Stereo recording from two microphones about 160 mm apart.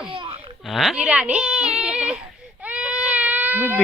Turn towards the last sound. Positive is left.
turn(degrees=-10)  # may be behind; listen again after turning